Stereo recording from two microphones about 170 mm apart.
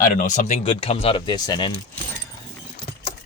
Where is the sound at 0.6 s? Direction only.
30° left (ahead or behind).